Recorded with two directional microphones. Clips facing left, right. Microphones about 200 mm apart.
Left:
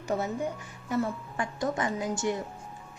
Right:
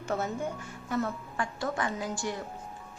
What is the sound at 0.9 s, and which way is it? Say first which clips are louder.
A woman's voice: left 2 dB; 15° left (ahead or behind).